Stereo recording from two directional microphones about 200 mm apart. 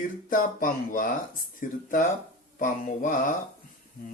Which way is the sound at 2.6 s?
40° left (ahead or behind).